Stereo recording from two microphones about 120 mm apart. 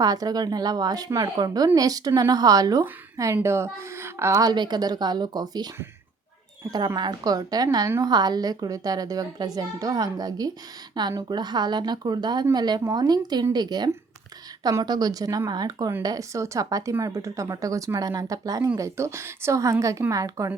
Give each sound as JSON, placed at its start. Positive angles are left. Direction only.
{"t": 0.0, "sound": "speech", "side_deg": -30}
{"t": 6.7, "sound": "speech", "side_deg": -35}